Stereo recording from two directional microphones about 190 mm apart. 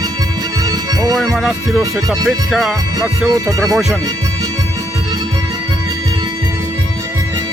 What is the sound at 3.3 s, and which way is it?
Speech, 15° right (ahead or behind).